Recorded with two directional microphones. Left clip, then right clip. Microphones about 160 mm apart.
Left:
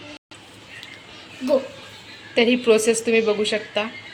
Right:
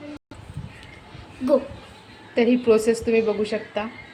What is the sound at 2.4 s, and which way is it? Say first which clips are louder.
A woman's voice: left 1 dB; 5° left (ahead or behind).